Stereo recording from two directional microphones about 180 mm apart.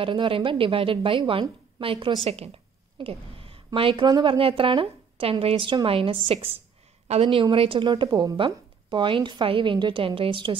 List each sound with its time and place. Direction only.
0.0 s a woman's voice: 30° right (ahead or behind)